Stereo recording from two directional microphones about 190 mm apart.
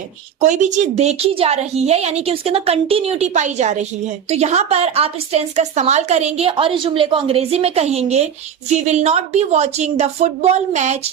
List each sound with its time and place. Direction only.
0.3 s a woman's voice: 40° right (ahead or behind)